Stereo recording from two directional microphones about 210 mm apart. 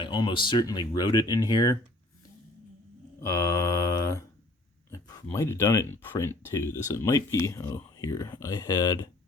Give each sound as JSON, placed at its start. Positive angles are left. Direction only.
{"t": 0.0, "sound": "speech", "side_deg": 20}
{"t": 3.2, "sound": "mantra", "side_deg": 15}
{"t": 4.9, "sound": "speech", "side_deg": 15}